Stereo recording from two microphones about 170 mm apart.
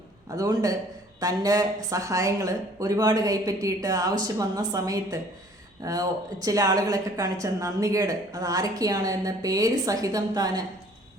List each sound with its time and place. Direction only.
0.3 s a woman's voice: 20° right (ahead or behind)